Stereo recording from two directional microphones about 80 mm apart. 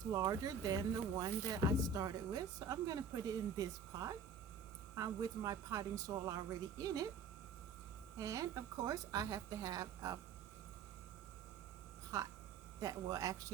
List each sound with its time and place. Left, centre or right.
0.1 s a woman's voice: right
8.2 s a woman's voice: right
12.1 s a woman's voice: right